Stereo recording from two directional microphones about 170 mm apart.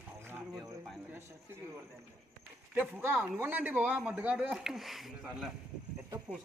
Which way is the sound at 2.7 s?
10° right (ahead or behind).